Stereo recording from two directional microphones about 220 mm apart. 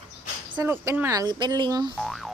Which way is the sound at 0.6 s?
10° right (ahead or behind).